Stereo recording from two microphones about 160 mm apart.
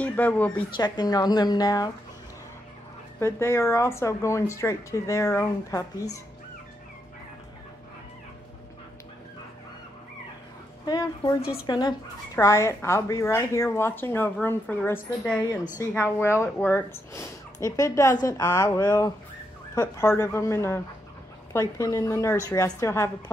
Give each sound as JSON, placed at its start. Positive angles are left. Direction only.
{"t": 0.0, "sound": "speech", "side_deg": 10}
{"t": 0.7, "sound": "a woman's voice", "side_deg": 25}
{"t": 3.2, "sound": "speech", "side_deg": 15}
{"t": 10.9, "sound": "a woman's voice", "side_deg": 20}